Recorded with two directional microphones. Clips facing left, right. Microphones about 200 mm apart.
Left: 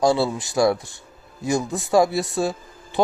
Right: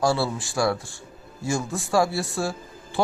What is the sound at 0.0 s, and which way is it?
A man's voice, 20° left (ahead or behind).